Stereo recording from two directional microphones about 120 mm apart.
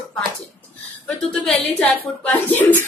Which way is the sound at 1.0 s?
10° left (ahead or behind).